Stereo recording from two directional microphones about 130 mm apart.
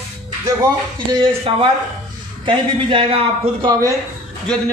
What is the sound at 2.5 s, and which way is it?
A man's voice, 40° right (ahead or behind).